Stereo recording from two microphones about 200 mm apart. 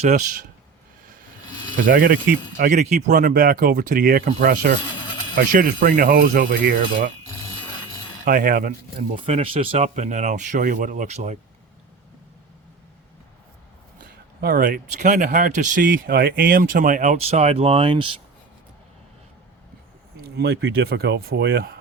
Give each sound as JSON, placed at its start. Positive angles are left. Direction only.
{"t": 0.1, "sound": "speech", "side_deg": -40}
{"t": 1.7, "sound": "speech", "side_deg": -45}
{"t": 8.2, "sound": "speech", "side_deg": -45}
{"t": 9.0, "sound": "speech", "side_deg": -30}
{"t": 14.4, "sound": "speech", "side_deg": -45}
{"t": 20.3, "sound": "speech", "side_deg": -55}